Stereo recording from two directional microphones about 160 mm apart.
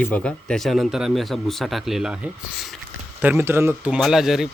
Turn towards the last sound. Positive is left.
turn(degrees=-5)  # may be behind; listen again after turning